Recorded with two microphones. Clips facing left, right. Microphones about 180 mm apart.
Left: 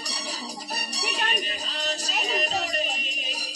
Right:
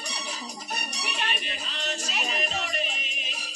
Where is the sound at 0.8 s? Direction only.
35° left (ahead or behind).